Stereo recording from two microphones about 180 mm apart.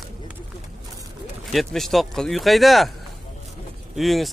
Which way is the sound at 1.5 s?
Centre (ahead or behind).